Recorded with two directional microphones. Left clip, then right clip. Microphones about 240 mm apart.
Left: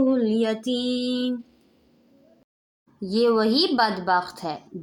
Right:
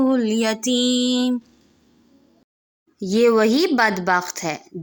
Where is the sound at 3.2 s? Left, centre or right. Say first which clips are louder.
Right 4 dB; right.